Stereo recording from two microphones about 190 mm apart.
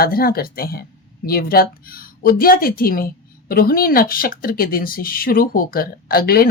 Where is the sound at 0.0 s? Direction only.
50° left (ahead or behind).